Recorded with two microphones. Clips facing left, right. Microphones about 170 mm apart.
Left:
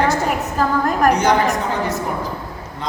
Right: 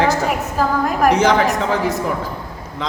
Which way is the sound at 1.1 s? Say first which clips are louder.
Right 3 dB; 90° right.